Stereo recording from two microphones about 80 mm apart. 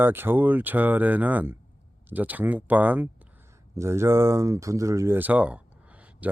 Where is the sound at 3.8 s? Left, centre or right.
Right.